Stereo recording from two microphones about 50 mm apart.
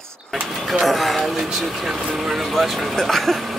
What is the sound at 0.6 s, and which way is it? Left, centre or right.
Speech, centre.